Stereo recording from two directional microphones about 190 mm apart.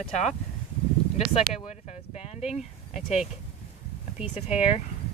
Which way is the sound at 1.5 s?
35° left (ahead or behind).